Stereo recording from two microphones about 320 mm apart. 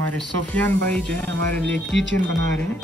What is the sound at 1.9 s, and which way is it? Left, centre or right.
Speech, left.